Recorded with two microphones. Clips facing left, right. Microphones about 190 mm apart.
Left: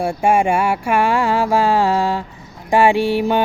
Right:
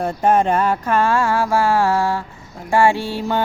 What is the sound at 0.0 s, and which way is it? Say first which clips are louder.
Music: left 1 dB; 10° left (ahead or behind).